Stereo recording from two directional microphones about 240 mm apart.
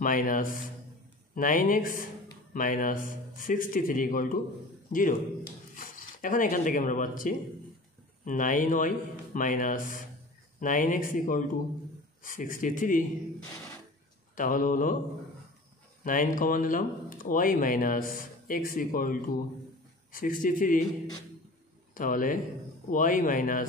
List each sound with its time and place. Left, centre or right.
0.0 s speech: left
14.3 s speech: left
16.0 s speech: left
21.9 s speech: left